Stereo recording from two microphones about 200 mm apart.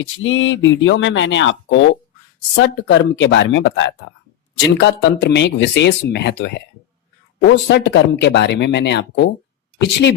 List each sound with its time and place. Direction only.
0.2 s speech: 70° left (ahead or behind)